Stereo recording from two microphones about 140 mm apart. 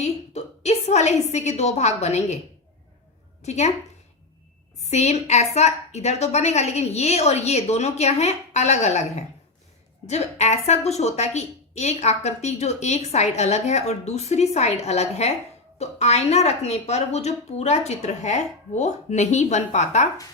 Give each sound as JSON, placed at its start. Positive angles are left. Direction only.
{"t": 0.0, "sound": "a woman's voice", "side_deg": 50}
{"t": 3.4, "sound": "a woman's voice", "side_deg": 55}
{"t": 4.9, "sound": "a woman's voice", "side_deg": 50}